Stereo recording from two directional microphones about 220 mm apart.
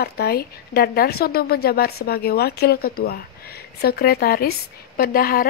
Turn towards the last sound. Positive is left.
turn(degrees=40)  # may be behind; listen again after turning